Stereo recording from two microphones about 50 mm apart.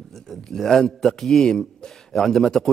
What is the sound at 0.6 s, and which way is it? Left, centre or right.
A man's voice, centre.